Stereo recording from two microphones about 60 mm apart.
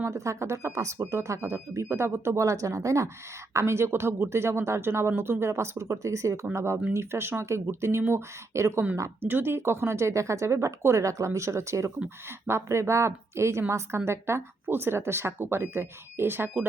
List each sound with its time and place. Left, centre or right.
0.0 s speech: right
3.5 s a woman's voice: right
6.9 s a woman's voice: right
9.2 s a woman's voice: right